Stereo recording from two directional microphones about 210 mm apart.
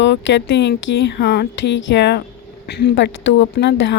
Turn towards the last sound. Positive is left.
turn(degrees=55)  # may be behind; listen again after turning